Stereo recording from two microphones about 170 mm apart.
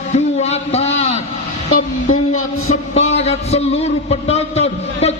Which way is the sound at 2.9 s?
40° left (ahead or behind).